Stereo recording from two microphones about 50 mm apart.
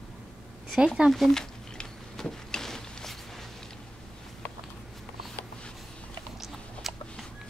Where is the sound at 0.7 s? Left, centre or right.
Centre.